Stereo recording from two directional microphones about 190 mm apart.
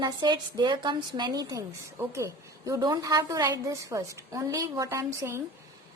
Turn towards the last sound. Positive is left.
turn(degrees=-15)  # may be behind; listen again after turning